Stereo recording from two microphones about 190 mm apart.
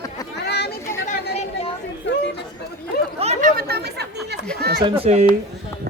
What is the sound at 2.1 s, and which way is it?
Chatter, 65° left (ahead or behind).